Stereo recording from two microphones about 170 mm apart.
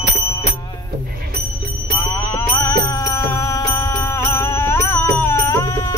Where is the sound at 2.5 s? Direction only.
20° left (ahead or behind).